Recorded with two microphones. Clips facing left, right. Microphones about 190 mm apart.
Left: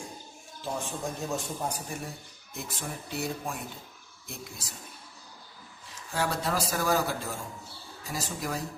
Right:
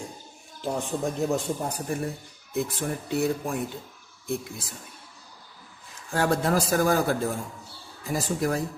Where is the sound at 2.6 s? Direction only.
55° right (ahead or behind).